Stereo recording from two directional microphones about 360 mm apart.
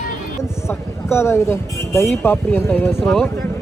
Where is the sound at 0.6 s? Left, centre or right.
Centre.